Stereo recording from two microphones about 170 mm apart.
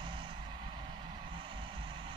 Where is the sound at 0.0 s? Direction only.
30° right (ahead or behind).